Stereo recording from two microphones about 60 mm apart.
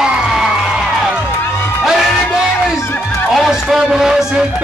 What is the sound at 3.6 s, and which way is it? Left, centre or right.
Music, centre.